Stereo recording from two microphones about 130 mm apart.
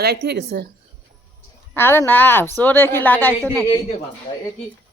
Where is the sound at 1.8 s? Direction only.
15° left (ahead or behind).